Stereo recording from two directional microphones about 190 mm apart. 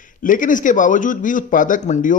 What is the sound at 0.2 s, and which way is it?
A man's voice, 45° left (ahead or behind).